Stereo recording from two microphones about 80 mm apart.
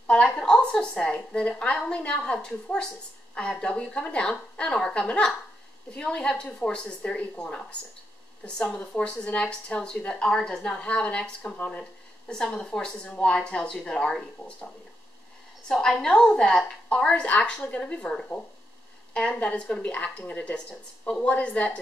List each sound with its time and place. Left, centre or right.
0.0 s a woman's voice: centre
15.7 s a woman's voice: centre